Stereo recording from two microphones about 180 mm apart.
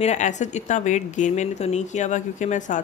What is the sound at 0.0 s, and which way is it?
A woman's voice, 40° left (ahead or behind).